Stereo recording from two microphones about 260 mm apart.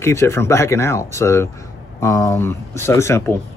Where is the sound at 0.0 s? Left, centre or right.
Centre.